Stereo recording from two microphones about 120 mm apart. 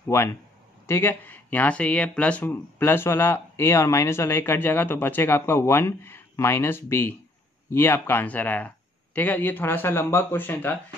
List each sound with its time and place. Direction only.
0.1 s speech: 20° left (ahead or behind)